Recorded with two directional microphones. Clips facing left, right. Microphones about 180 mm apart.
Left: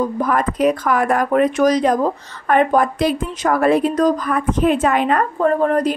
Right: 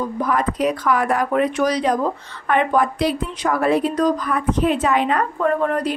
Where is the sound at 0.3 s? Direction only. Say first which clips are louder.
Left 2 dB; 50° left (ahead or behind).